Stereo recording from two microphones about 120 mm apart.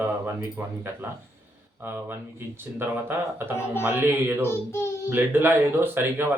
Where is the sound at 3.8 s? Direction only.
15° right (ahead or behind).